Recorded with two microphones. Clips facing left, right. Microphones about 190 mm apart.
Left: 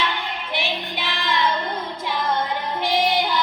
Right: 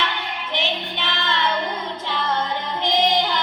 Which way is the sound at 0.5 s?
10° left (ahead or behind).